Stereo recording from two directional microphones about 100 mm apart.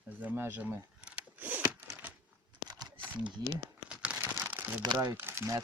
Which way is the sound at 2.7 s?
45° right (ahead or behind).